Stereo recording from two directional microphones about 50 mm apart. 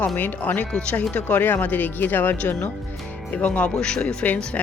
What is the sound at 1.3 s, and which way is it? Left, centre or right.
Speech, left.